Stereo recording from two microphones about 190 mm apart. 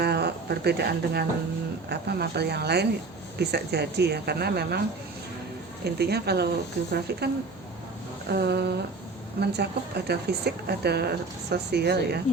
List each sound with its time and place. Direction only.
0.0 s speech: 60° right (ahead or behind)
5.8 s speech: 60° right (ahead or behind)
8.3 s speech: 60° right (ahead or behind)